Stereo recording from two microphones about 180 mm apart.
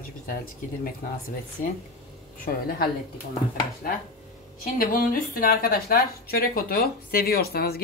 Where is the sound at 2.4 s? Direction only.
55° left (ahead or behind).